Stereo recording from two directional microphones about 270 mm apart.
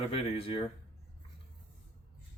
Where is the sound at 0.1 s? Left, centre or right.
Left.